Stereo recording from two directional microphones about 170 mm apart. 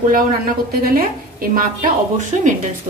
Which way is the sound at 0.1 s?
60° right (ahead or behind).